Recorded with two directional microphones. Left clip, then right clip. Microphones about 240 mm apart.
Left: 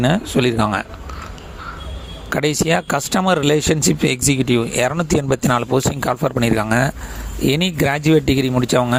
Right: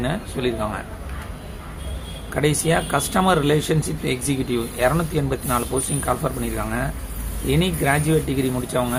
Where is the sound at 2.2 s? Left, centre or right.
Left.